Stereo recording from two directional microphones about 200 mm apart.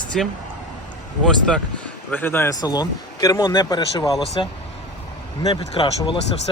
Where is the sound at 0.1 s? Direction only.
Centre (ahead or behind).